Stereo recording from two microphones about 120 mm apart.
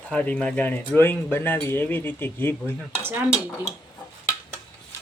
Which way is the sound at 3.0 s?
15° right (ahead or behind).